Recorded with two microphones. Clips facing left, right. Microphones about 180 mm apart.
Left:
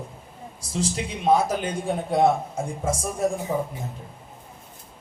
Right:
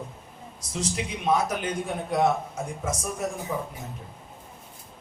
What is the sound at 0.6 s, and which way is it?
Speech, 30° left (ahead or behind).